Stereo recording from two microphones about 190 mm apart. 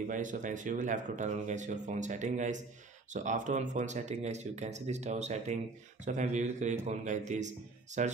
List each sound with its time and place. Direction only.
0.1 s speech: 45° right (ahead or behind)